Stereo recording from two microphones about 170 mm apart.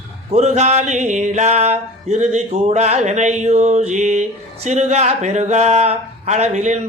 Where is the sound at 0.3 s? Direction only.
40° right (ahead or behind).